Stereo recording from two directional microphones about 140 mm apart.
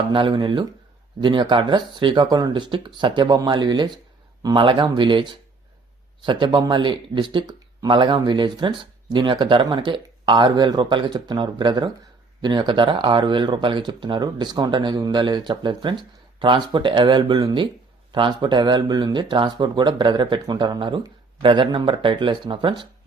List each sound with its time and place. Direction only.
0.1 s speech: 35° right (ahead or behind)